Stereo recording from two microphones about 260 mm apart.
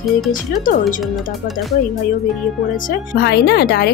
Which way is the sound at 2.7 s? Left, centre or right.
Left.